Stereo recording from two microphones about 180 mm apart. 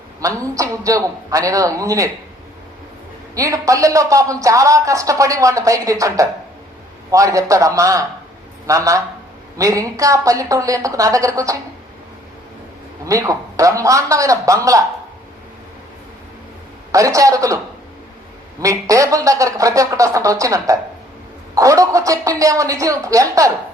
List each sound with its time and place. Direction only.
0.2 s speech: 15° right (ahead or behind)
3.3 s a woman's voice: 20° right (ahead or behind)
13.1 s speech: 20° right (ahead or behind)
16.9 s speech: 20° right (ahead or behind)
18.6 s speech: 20° right (ahead or behind)